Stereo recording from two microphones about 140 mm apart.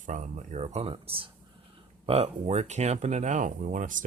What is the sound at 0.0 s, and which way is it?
Speech, 60° right (ahead or behind).